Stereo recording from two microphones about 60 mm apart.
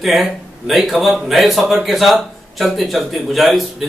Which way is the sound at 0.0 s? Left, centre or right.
Centre.